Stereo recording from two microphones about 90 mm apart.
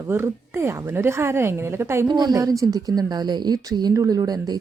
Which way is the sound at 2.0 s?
50° right (ahead or behind).